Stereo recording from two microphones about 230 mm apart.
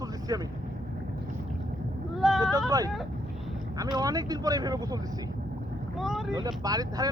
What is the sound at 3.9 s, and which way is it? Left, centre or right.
Speech, centre.